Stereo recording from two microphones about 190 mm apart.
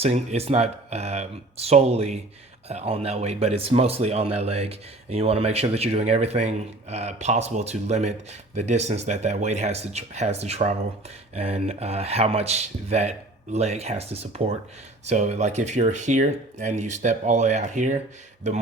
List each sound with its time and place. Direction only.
0.0 s a man's voice: 30° right (ahead or behind)